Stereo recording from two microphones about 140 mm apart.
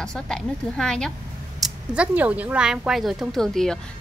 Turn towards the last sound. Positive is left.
turn(degrees=5)  # may be behind; listen again after turning